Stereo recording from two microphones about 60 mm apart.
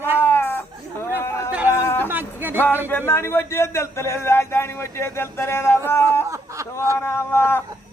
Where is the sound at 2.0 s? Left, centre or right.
Right.